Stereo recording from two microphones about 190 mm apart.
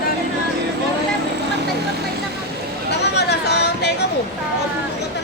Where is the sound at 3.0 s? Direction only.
60° left (ahead or behind).